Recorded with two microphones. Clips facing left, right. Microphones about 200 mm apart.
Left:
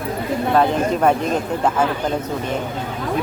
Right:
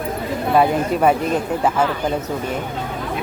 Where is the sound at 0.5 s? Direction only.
10° right (ahead or behind).